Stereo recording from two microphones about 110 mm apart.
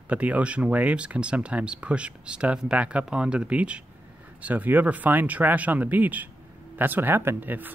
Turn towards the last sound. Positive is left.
turn(degrees=-15)  # may be behind; listen again after turning